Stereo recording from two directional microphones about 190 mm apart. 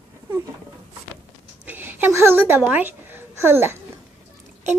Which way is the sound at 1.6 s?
10° right (ahead or behind).